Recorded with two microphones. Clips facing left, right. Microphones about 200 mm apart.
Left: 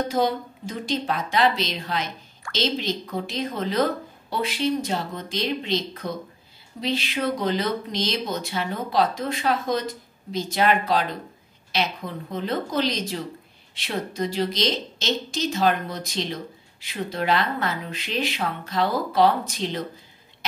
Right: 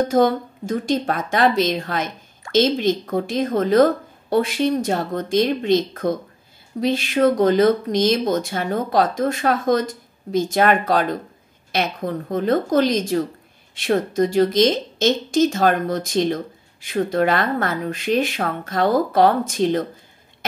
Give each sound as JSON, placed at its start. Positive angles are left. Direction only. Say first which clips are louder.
{"t": 0.1, "sound": "speech", "louder": "right 6 dB", "side_deg": -50}